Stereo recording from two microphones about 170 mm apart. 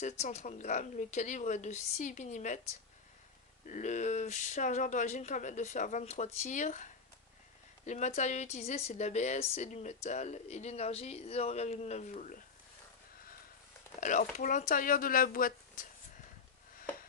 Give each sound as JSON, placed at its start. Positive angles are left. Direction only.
{"t": 0.0, "sound": "speech", "side_deg": 40}
{"t": 3.6, "sound": "speech", "side_deg": 45}
{"t": 14.0, "sound": "speech", "side_deg": 50}